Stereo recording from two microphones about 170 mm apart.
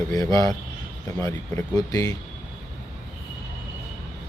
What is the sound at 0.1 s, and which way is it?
Speech, 20° left (ahead or behind).